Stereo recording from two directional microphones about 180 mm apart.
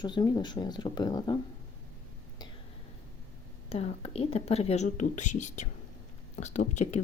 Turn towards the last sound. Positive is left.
turn(degrees=40)  # may be behind; listen again after turning